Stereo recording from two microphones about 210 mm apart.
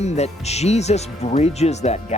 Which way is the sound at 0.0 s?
30° left (ahead or behind).